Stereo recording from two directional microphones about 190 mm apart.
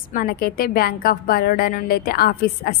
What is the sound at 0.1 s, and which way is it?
A woman's voice, 50° left (ahead or behind).